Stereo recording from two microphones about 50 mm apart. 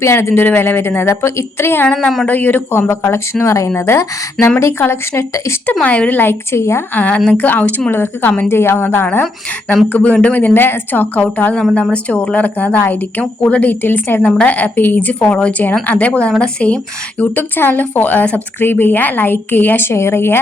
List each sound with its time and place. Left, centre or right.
0.0 s a woman's voice: left
2.2 s speech: left
2.9 s speech: left
5.8 s speech: left
6.2 s speech: left
6.9 s a woman's voice: left
8.4 s a woman's voice: left
9.9 s speech: left
11.7 s speech: left
13.8 s a woman's voice: left
14.2 s a woman's voice: centre
14.4 s speech: left
17.6 s speech: left
19.9 s speech: left